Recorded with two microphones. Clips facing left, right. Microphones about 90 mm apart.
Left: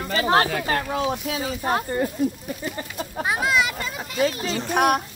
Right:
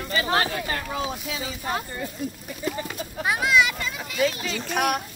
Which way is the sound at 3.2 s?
30° left (ahead or behind).